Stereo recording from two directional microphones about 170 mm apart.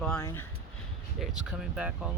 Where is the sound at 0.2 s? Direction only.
20° left (ahead or behind).